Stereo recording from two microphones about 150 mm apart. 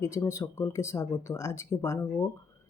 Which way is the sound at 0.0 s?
20° left (ahead or behind).